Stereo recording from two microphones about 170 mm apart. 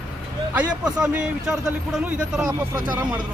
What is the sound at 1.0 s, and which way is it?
A man's voice, 5° right (ahead or behind).